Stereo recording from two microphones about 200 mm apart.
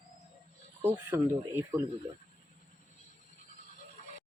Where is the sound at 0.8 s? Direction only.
10° right (ahead or behind).